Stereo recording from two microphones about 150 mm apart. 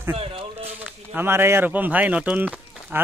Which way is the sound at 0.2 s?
40° right (ahead or behind).